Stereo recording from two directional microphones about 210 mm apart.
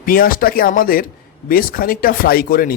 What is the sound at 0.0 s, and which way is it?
Speech, 45° left (ahead or behind).